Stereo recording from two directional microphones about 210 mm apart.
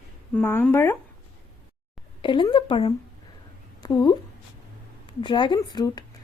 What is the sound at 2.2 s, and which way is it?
A woman's voice, 20° left (ahead or behind).